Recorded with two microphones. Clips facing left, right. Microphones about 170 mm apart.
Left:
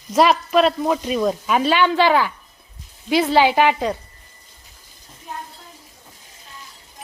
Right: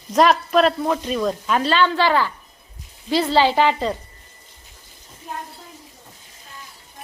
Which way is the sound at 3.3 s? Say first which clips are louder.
Left 1 dB; 10° left (ahead or behind).